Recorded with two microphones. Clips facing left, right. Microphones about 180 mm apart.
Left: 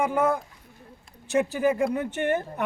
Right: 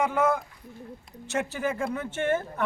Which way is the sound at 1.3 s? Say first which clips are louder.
Left 6 dB; 15° left (ahead or behind).